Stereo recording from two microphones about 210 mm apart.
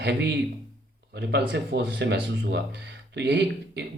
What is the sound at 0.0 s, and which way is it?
Speech, 55° right (ahead or behind).